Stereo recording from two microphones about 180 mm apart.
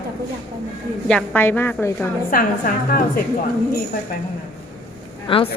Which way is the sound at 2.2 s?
50° left (ahead or behind).